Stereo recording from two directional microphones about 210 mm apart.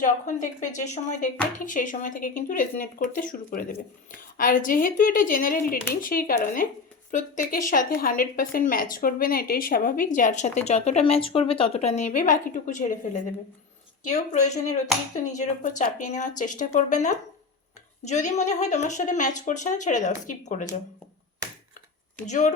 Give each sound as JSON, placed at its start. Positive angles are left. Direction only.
{"t": 0.0, "sound": "a woman's voice", "side_deg": 35}
{"t": 14.0, "sound": "a woman's voice", "side_deg": 35}
{"t": 22.3, "sound": "a woman's voice", "side_deg": 35}